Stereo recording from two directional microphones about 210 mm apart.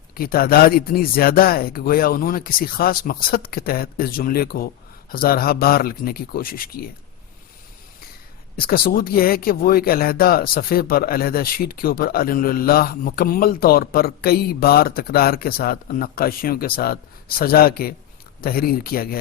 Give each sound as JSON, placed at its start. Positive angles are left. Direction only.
{"t": 0.1, "sound": "speech", "side_deg": 45}
{"t": 8.5, "sound": "speech", "side_deg": 45}